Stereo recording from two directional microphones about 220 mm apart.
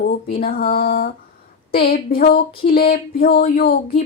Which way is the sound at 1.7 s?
45° left (ahead or behind).